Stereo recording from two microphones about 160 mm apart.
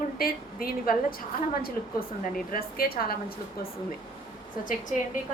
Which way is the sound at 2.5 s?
65° left (ahead or behind).